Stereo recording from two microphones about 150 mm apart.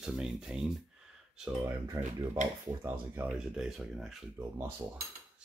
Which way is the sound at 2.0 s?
20° right (ahead or behind).